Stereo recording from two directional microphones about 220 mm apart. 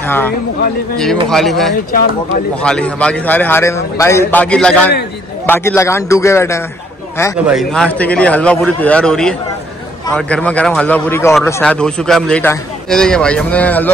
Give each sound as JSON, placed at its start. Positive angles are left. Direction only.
{"t": 0.0, "sound": "speech", "side_deg": 10}
{"t": 1.3, "sound": "a man's voice", "side_deg": 0}
{"t": 1.9, "sound": "speech", "side_deg": 40}
{"t": 2.6, "sound": "a man's voice", "side_deg": 5}
{"t": 7.4, "sound": "a man's voice", "side_deg": 0}